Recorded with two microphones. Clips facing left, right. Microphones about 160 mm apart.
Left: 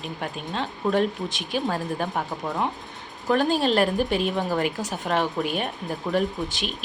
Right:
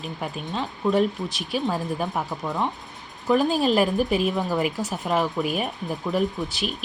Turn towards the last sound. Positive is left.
turn(degrees=0)  # may be behind; listen again after turning